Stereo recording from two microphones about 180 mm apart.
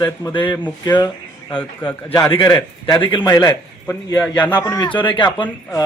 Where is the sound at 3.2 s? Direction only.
15° left (ahead or behind).